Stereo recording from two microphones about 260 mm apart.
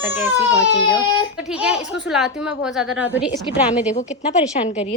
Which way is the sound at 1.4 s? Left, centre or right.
Centre.